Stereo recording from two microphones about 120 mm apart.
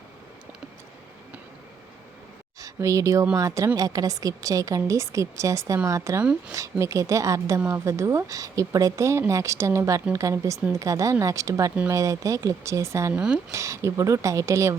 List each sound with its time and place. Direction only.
2.6 s a woman's voice: 25° right (ahead or behind)
13.1 s speech: 10° right (ahead or behind)
13.5 s a woman's voice: 25° right (ahead or behind)